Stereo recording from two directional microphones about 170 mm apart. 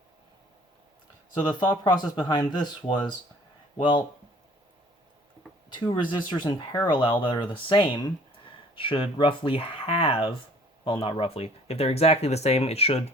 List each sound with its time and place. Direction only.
1.5 s speech: 25° left (ahead or behind)
5.7 s speech: 25° left (ahead or behind)